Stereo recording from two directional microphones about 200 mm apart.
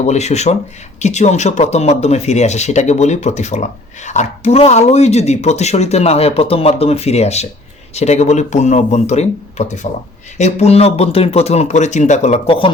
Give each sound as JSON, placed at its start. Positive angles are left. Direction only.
{"t": 0.0, "sound": "speech", "side_deg": 35}